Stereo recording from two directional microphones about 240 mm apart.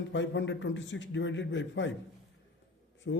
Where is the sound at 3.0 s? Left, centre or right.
Left.